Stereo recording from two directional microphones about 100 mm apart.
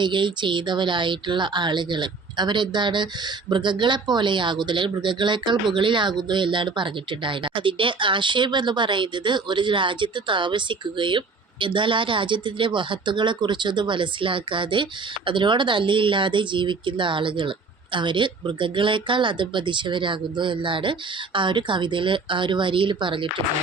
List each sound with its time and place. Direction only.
0.0 s speech: 55° right (ahead or behind)